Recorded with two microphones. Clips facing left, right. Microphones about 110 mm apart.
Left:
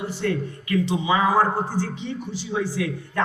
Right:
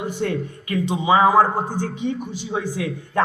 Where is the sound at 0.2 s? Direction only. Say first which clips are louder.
Left 1 dB; 20° right (ahead or behind).